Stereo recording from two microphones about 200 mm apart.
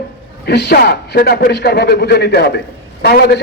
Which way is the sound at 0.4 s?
55° left (ahead or behind).